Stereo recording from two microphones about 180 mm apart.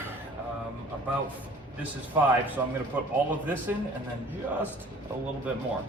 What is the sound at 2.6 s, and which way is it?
A man's voice, 10° right (ahead or behind).